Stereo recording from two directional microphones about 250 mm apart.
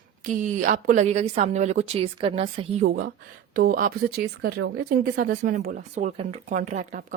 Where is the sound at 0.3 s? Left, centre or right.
Right.